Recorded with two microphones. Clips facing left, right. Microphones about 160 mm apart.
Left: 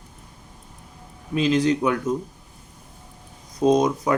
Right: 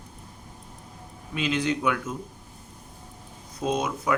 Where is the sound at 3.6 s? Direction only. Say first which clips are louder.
Left 8 dB; 35° left (ahead or behind).